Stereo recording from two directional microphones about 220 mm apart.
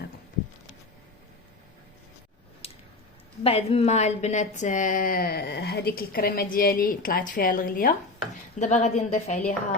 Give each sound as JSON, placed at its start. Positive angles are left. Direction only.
{"t": 2.6, "sound": "squish", "side_deg": 25}
{"t": 3.4, "sound": "a woman's voice", "side_deg": 25}